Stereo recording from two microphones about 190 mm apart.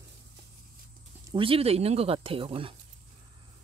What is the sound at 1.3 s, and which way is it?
Speech, 30° right (ahead or behind).